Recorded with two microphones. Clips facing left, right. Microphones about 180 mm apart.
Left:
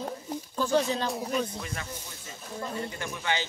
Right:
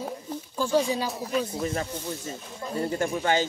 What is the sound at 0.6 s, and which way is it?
Speech, 10° right (ahead or behind).